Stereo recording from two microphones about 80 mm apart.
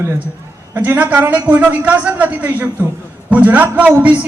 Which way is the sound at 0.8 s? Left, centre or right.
Centre.